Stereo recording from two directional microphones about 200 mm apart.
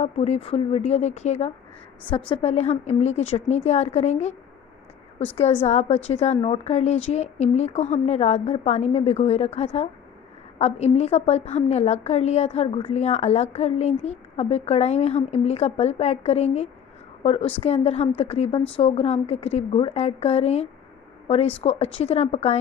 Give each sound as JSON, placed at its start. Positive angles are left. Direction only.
{"t": 0.0, "sound": "a woman's voice", "side_deg": 30}
{"t": 5.4, "sound": "a woman's voice", "side_deg": 30}